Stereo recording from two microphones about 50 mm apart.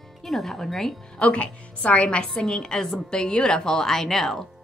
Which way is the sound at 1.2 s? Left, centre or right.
Left.